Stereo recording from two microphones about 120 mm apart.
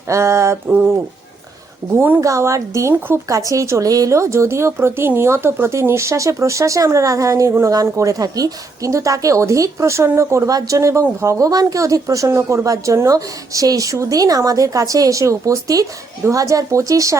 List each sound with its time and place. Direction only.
0.1 s a woman's voice: 25° right (ahead or behind)
2.0 s a woman's voice: 15° right (ahead or behind)
2.2 s a woman's voice: 25° right (ahead or behind)